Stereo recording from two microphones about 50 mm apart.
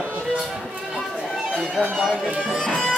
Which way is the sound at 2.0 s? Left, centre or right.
Centre.